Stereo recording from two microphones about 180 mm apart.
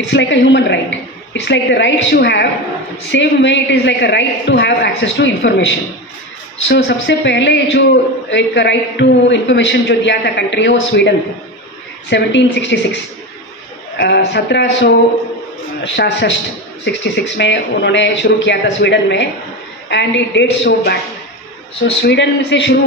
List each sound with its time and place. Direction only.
0.1 s a man's voice: 80° left
3.1 s a man's voice: 90° left
13.9 s speech: 70° left (ahead or behind)
22.0 s speech: 80° left